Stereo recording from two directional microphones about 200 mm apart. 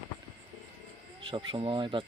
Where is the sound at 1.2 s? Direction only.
25° right (ahead or behind).